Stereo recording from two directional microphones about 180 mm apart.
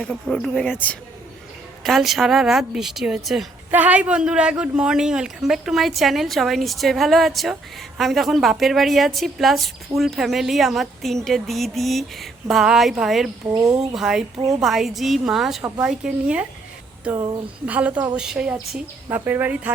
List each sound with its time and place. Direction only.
0.0 s speech: 5° left (ahead or behind)
13.5 s speech: 20° right (ahead or behind)
13.7 s speech: 5° right (ahead or behind)
17.7 s a woman's voice: 10° right (ahead or behind)